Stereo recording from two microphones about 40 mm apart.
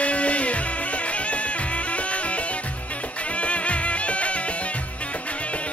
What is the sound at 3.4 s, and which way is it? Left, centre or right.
Music, left.